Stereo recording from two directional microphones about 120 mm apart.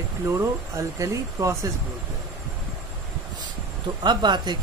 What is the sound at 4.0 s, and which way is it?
Speech, 40° right (ahead or behind).